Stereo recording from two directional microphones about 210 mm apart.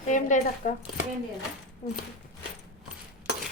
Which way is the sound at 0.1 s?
35° left (ahead or behind).